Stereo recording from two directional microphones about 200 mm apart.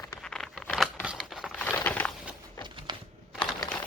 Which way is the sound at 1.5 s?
10° left (ahead or behind).